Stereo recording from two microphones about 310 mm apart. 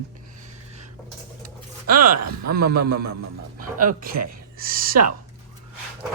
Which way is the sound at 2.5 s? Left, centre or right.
Right.